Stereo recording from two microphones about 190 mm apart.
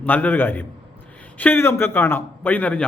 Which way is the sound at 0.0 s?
10° left (ahead or behind).